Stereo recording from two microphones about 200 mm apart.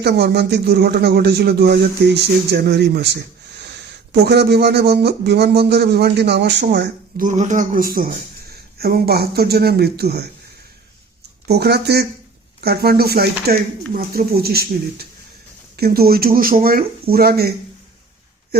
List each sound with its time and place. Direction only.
0.0 s speech: 55° right (ahead or behind)
11.4 s speech: 55° right (ahead or behind)